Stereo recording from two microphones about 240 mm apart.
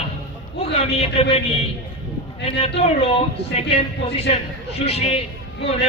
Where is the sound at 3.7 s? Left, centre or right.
Left.